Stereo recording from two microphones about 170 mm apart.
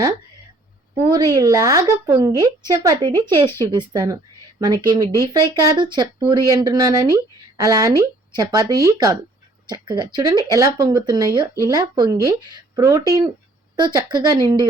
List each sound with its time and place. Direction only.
1.1 s speech: 20° right (ahead or behind)